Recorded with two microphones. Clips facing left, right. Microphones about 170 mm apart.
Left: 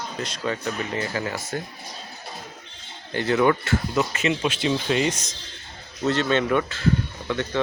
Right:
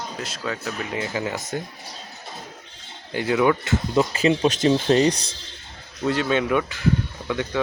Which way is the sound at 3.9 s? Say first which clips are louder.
Right 7 dB; 30° right (ahead or behind).